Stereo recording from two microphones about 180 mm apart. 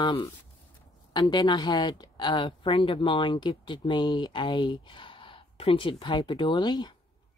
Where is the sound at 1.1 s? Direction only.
25° left (ahead or behind).